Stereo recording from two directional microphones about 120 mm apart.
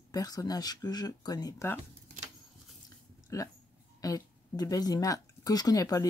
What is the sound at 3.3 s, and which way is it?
Speech, 25° left (ahead or behind).